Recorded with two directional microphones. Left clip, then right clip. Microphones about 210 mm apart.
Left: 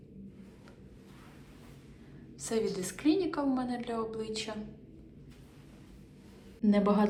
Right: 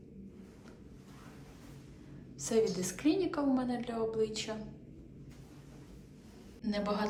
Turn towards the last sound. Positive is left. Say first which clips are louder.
# left 7 dB
turn(degrees=25)  # may be behind; listen again after turning